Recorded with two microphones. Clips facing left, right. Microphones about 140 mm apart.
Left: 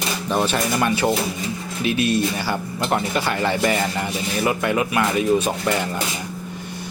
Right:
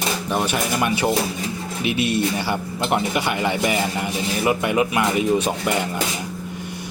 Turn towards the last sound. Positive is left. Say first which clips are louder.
# left 1 dB
turn(degrees=-20)  # may be behind; listen again after turning